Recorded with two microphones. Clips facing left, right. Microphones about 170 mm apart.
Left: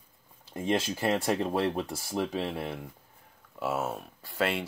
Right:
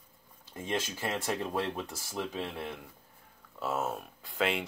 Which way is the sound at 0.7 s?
35° left (ahead or behind).